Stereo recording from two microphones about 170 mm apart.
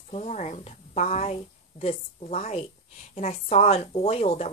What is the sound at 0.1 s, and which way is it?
Speech, 40° left (ahead or behind).